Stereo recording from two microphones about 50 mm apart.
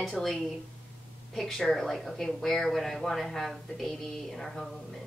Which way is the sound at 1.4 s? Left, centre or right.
Centre.